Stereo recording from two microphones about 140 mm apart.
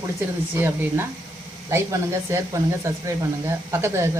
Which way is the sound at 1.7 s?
20° right (ahead or behind).